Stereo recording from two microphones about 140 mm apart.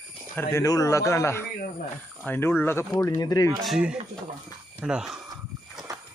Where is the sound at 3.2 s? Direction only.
25° left (ahead or behind).